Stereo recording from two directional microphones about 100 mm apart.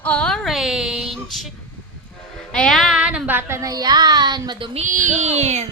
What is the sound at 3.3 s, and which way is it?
Speech, 25° right (ahead or behind).